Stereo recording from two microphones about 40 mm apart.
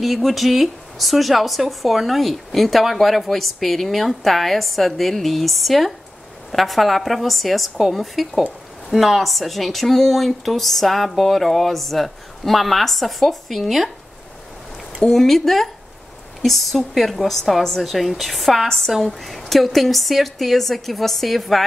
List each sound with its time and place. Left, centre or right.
0.0 s speech: centre
15.0 s speech: centre